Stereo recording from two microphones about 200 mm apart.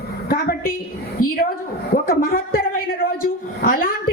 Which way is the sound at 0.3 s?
50° left (ahead or behind).